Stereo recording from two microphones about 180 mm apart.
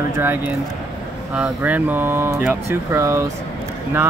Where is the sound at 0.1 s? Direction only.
10° right (ahead or behind).